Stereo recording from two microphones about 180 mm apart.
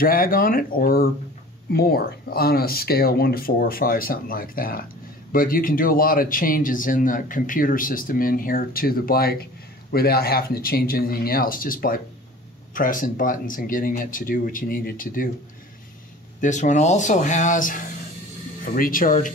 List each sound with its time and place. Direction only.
0.0 s speech: 50° left (ahead or behind)
16.3 s speech: 45° left (ahead or behind)